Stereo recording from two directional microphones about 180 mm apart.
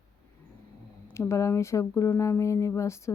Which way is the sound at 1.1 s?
15° left (ahead or behind).